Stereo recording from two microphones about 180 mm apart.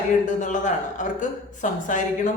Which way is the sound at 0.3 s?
45° left (ahead or behind).